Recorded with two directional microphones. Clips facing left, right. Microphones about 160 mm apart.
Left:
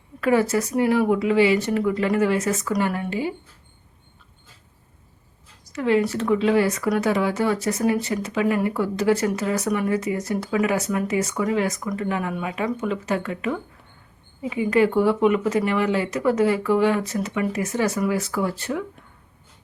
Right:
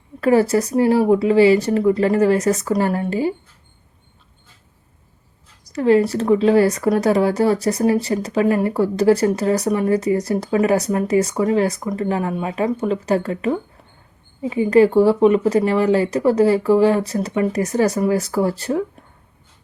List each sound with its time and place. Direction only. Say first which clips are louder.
0.2 s speech: right 5 dB; 35° right (ahead or behind)
5.7 s speech: right 5 dB; 35° right (ahead or behind)